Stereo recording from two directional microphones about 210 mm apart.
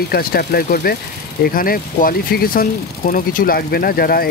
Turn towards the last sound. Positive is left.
turn(degrees=45)  # may be behind; listen again after turning